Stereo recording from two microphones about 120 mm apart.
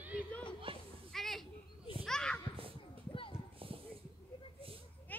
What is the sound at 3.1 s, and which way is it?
Clip-clop, 50° left (ahead or behind).